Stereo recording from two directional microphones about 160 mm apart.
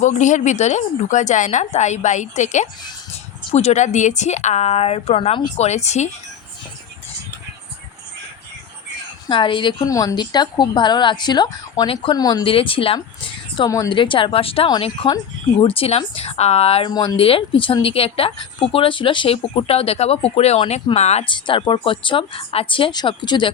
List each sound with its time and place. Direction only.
0.0 s a woman's voice: 50° left (ahead or behind)
9.3 s a woman's voice: 30° left (ahead or behind)
16.9 s speech: 25° left (ahead or behind)